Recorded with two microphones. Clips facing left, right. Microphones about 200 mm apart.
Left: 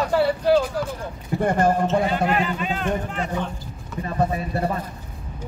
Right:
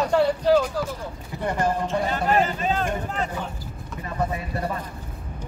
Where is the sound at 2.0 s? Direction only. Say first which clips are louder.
Even; 45° right (ahead or behind).